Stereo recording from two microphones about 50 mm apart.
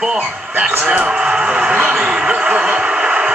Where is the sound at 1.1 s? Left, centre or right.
Centre.